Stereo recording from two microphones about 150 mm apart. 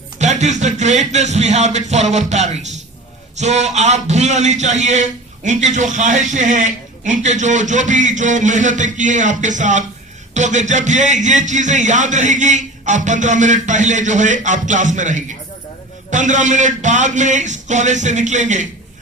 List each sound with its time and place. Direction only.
0.2 s a man's voice: 50° right (ahead or behind)